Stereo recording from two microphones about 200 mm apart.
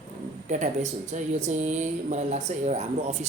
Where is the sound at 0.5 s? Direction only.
35° right (ahead or behind).